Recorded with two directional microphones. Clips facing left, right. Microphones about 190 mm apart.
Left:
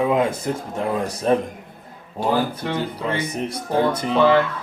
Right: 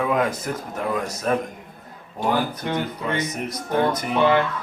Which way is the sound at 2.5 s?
30° left (ahead or behind).